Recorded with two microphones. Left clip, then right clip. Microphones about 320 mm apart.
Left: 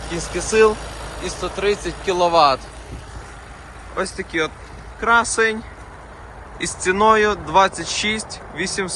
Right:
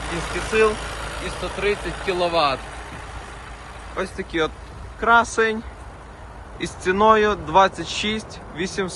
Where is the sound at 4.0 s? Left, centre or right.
Centre.